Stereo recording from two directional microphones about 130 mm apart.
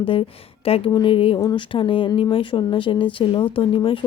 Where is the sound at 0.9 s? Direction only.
30° left (ahead or behind).